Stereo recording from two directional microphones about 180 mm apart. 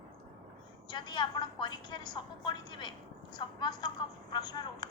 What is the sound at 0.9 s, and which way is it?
A woman's voice, 25° left (ahead or behind).